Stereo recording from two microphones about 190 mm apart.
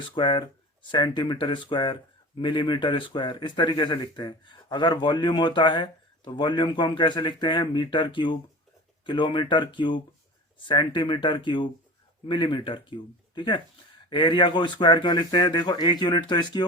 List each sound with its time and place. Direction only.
0.1 s speech: 25° left (ahead or behind)